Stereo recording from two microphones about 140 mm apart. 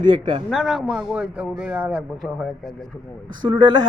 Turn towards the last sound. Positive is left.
turn(degrees=-35)  # may be behind; listen again after turning